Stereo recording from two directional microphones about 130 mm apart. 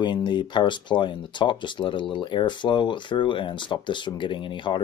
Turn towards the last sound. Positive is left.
turn(degrees=35)  # may be behind; listen again after turning